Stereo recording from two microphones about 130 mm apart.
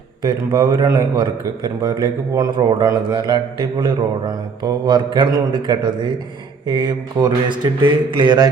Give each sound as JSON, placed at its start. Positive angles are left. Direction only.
{"t": 0.2, "sound": "a man's voice", "side_deg": -30}